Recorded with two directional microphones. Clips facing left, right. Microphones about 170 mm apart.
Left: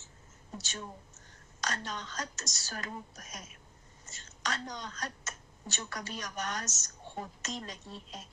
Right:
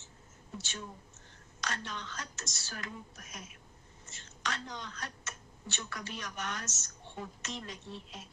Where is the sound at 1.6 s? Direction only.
40° left (ahead or behind).